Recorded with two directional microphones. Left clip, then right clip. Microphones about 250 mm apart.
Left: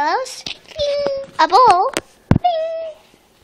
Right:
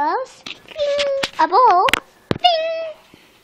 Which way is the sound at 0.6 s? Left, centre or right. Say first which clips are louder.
Even; right.